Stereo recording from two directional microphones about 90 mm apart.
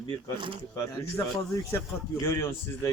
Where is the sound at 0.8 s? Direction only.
35° left (ahead or behind).